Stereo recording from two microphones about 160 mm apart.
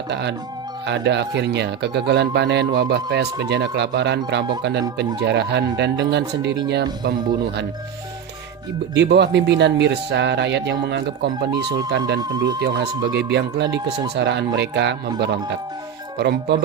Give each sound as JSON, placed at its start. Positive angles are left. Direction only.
{"t": 0.1, "sound": "speech", "side_deg": -90}
{"t": 9.0, "sound": "speech", "side_deg": -90}